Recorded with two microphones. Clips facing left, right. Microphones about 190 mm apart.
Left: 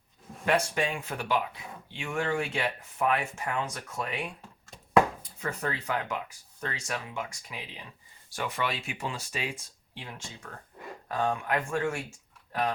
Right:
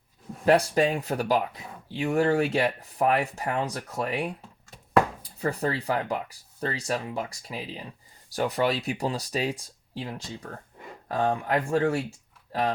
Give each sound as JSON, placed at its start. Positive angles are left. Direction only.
{"t": 0.4, "sound": "speech", "side_deg": -35}
{"t": 5.4, "sound": "speech", "side_deg": -35}